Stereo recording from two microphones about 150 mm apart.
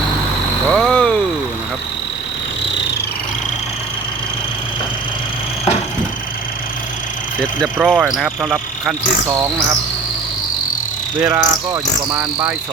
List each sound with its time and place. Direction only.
0.7 s a sound: centre (ahead or behind)
7.3 s speech: 5° left (ahead or behind)
9.2 s speech: 25° right (ahead or behind)
11.2 s speech: 20° right (ahead or behind)